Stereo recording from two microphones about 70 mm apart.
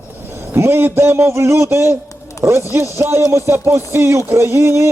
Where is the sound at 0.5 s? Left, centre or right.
Right.